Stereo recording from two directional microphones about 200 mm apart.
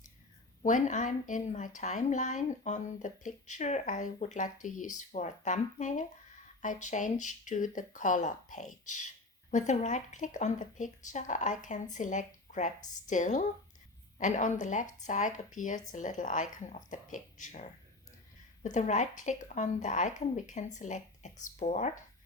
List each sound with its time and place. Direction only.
0.6 s speech: 40° left (ahead or behind)